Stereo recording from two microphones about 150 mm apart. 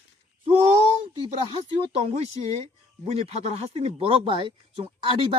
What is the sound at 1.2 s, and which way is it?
A man's voice, 40° right (ahead or behind).